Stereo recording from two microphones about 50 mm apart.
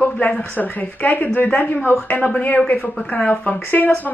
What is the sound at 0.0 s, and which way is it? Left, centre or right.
A woman's voice, left.